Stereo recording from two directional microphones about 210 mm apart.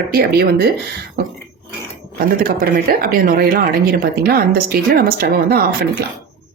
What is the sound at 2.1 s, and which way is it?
Speech, 45° right (ahead or behind).